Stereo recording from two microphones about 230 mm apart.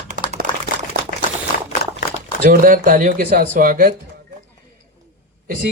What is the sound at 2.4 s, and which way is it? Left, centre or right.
A man's voice, right.